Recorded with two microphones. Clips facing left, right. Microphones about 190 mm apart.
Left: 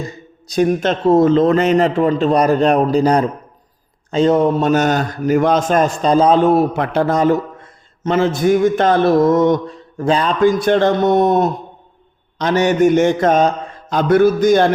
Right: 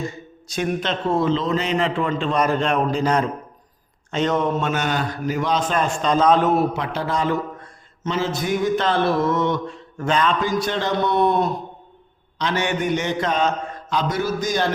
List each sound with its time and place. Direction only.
0.5 s a man's voice: 35° left (ahead or behind)
6.7 s speech: 55° left (ahead or behind); by 10.3 s 35° left (ahead or behind)
10.4 s a man's voice: 55° left (ahead or behind)